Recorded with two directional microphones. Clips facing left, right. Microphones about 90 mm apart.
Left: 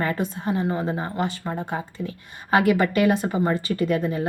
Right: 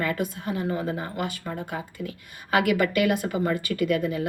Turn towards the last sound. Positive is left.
turn(degrees=35)  # may be behind; listen again after turning